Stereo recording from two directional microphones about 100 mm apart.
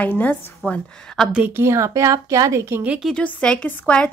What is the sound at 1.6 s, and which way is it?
Speech, 30° right (ahead or behind).